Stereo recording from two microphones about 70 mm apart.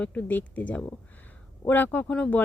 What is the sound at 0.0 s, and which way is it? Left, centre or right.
Speech, left.